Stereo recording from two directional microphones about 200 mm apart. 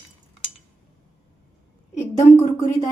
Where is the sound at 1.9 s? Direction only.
35° left (ahead or behind).